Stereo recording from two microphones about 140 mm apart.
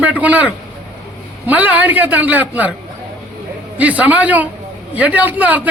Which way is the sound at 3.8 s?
10° right (ahead or behind).